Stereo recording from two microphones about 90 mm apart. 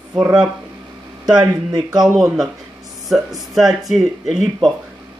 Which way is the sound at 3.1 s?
Centre (ahead or behind).